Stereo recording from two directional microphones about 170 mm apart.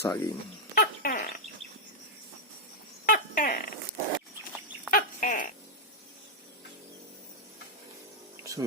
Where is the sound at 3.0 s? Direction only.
55° left (ahead or behind).